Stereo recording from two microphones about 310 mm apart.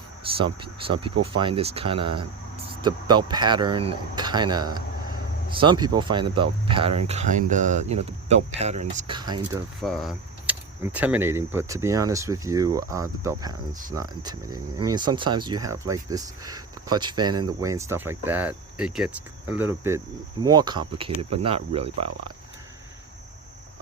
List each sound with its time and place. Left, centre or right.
0.3 s speech: centre
9.8 s speech: centre